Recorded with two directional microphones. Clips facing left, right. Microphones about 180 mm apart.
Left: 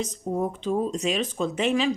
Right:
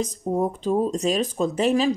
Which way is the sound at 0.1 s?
35° right (ahead or behind).